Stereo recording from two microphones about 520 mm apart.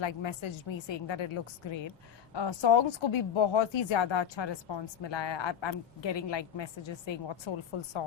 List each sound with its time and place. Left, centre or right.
0.0 s speech: left